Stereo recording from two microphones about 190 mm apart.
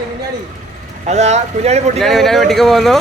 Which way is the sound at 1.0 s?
35° right (ahead or behind).